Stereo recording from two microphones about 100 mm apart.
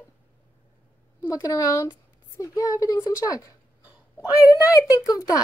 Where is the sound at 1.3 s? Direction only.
35° left (ahead or behind).